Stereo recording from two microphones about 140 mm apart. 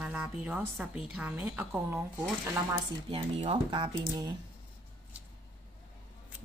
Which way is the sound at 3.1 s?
40° right (ahead or behind).